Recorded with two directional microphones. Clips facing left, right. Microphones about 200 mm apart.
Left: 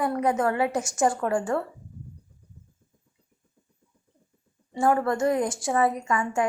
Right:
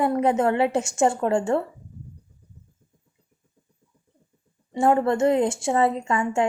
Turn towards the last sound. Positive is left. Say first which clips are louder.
# right 3 dB
turn(degrees=-25)  # may be behind; listen again after turning